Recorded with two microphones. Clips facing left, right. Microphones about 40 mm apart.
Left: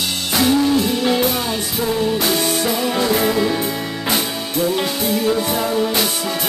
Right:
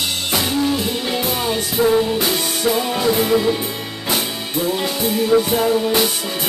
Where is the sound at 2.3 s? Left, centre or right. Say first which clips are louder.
Left 3 dB; centre.